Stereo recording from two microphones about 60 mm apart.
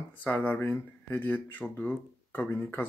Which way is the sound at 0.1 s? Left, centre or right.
Left.